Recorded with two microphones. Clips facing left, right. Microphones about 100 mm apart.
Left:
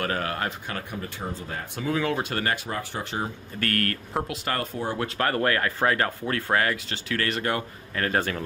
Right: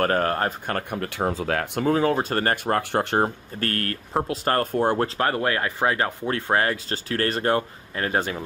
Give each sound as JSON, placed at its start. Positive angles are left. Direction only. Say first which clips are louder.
{"t": 0.0, "sound": "speech", "louder": "right 6 dB", "side_deg": -45}
{"t": 1.8, "sound": "speech", "louder": "right 4 dB", "side_deg": -40}
{"t": 3.5, "sound": "speech", "louder": "even", "side_deg": -30}
{"t": 4.5, "sound": "speech", "louder": "right 7 dB", "side_deg": -50}
{"t": 4.9, "sound": "speech", "louder": "right 3 dB", "side_deg": -30}
{"t": 8.0, "sound": "speech", "louder": "right 1 dB", "side_deg": -20}